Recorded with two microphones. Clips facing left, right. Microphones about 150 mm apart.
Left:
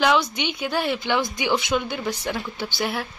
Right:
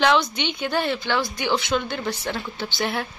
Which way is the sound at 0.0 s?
5° left (ahead or behind).